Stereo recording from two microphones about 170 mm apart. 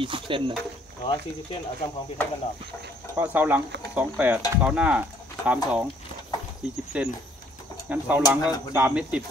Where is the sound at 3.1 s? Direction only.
10° right (ahead or behind).